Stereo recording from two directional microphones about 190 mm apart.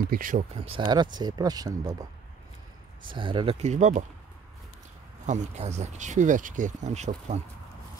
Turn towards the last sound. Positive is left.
turn(degrees=-35)  # may be behind; listen again after turning